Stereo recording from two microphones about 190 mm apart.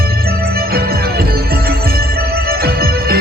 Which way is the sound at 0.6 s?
55° right (ahead or behind).